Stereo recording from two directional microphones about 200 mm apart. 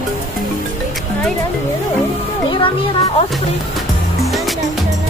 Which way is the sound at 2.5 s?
25° left (ahead or behind).